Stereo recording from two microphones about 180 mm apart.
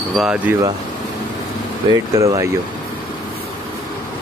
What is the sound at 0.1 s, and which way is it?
Speech, 5° right (ahead or behind).